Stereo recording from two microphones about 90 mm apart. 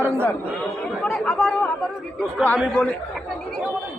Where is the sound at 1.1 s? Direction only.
10° left (ahead or behind).